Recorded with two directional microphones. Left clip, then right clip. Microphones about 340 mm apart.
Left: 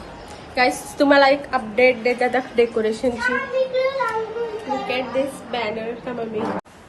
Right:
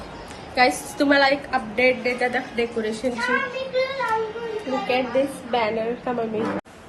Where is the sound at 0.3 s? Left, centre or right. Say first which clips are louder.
Even; centre.